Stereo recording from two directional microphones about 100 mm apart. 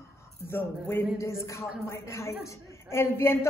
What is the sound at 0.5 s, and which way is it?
A woman's voice, 20° left (ahead or behind).